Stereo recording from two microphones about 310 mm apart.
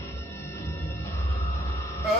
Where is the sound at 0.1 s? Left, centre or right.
Centre.